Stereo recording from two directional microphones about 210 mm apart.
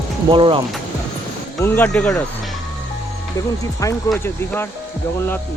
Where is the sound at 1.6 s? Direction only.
10° left (ahead or behind).